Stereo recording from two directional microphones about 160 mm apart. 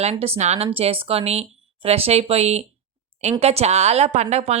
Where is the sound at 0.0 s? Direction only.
40° right (ahead or behind).